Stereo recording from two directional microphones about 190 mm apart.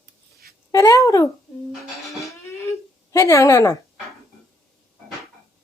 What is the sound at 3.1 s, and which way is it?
Speech, 15° left (ahead or behind).